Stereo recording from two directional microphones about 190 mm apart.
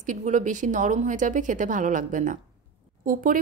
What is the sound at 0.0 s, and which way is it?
A woman's voice, 40° right (ahead or behind).